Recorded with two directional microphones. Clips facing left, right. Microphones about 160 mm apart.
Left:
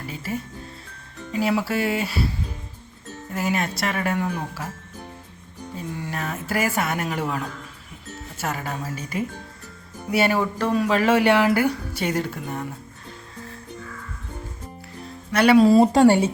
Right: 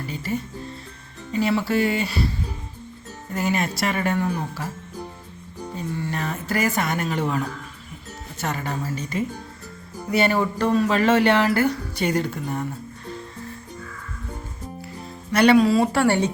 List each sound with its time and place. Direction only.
0.1 s speech: 5° left (ahead or behind)
3.3 s speech: centre (ahead or behind)
6.0 s speech: 5° left (ahead or behind)
15.3 s speech: centre (ahead or behind)
15.9 s speech: 15° left (ahead or behind)